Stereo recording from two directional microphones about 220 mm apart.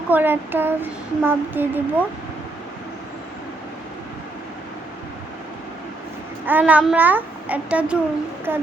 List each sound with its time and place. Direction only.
0.1 s child singing: 10° right (ahead or behind)
6.4 s child singing: 10° right (ahead or behind)